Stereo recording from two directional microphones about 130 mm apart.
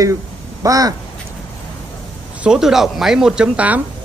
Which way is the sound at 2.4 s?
5° right (ahead or behind).